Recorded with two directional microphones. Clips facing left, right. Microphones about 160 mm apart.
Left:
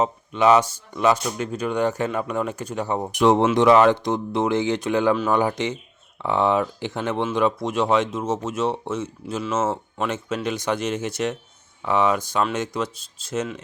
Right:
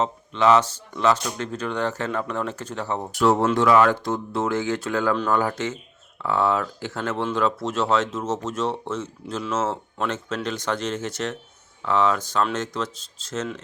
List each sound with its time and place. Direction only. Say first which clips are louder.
0.0 s speech: left 2 dB; 15° left (ahead or behind)
5.1 s speech: left 2 dB; 5° left (ahead or behind)